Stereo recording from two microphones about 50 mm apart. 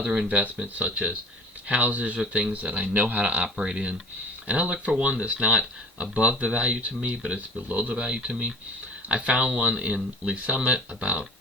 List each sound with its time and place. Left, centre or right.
0.0 s speech: right
2.1 s speech: centre
2.5 s speech: right